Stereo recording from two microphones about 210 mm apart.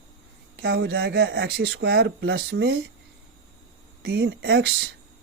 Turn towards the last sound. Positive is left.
turn(degrees=-50)  # may be behind; listen again after turning